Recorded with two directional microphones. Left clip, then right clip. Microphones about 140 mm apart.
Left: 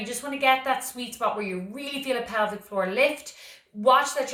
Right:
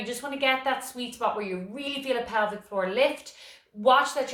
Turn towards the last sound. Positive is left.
turn(degrees=-20)  # may be behind; listen again after turning